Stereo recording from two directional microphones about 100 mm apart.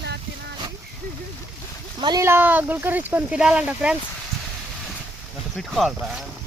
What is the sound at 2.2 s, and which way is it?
Speech, 25° right (ahead or behind).